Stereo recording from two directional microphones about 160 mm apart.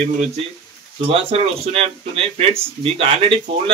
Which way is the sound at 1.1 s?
40° right (ahead or behind).